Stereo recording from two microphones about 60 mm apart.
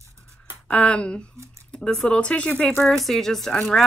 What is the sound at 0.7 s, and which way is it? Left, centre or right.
Speech, centre.